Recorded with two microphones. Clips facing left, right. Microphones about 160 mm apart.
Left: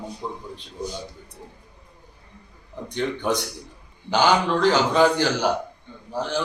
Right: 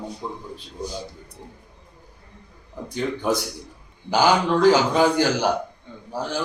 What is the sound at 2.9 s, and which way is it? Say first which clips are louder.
A man's voice: right 1 dB; 5° right (ahead or behind).